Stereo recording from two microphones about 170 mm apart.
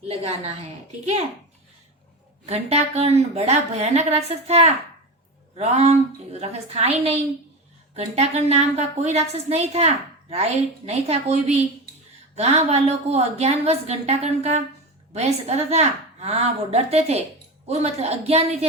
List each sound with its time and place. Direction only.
0.1 s a woman's voice: 40° right (ahead or behind)
2.5 s a woman's voice: 40° right (ahead or behind)